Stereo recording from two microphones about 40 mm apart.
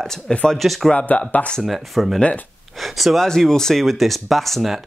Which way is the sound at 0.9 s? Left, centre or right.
Left.